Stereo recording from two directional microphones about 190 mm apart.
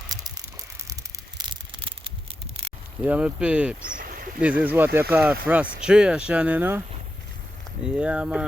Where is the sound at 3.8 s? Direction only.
45° right (ahead or behind).